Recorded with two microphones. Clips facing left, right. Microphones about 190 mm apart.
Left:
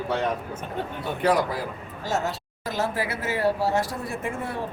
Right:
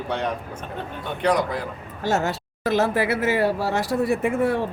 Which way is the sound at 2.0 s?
70° right (ahead or behind).